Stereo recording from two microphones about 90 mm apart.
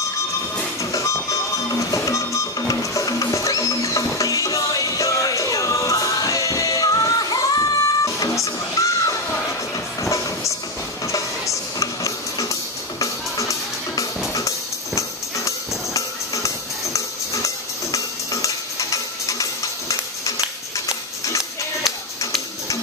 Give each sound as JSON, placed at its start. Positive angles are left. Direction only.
{"t": 0.9, "sound": "music", "side_deg": 35}
{"t": 10.0, "sound": "train", "side_deg": 35}
{"t": 11.1, "sound": "music", "side_deg": 35}
{"t": 20.7, "sound": "music", "side_deg": 35}